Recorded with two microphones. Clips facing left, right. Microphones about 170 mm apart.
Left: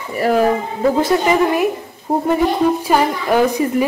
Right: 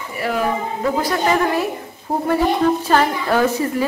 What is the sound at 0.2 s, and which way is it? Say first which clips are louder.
Speech: left 7 dB; 40° left (ahead or behind).